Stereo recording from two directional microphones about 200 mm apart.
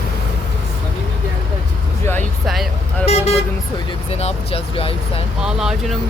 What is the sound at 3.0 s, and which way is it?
Vehicle, 30° left (ahead or behind).